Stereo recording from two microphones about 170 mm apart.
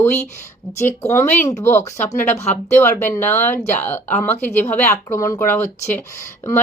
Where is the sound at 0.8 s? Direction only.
15° left (ahead or behind).